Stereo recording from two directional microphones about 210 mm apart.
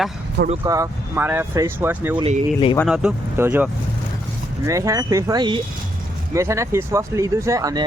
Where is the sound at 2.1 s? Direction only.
30° right (ahead or behind).